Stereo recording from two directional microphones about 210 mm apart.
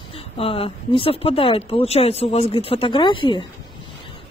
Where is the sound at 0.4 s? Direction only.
25° left (ahead or behind).